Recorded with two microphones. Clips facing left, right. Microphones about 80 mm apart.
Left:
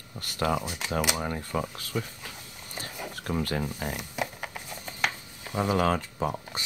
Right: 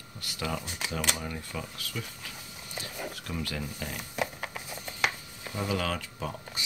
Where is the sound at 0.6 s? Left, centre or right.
Centre.